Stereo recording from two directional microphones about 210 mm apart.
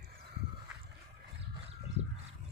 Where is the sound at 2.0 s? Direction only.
30° right (ahead or behind).